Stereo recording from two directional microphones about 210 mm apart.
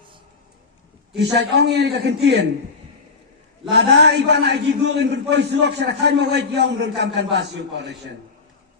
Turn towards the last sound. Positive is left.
turn(degrees=-55)  # may be behind; listen again after turning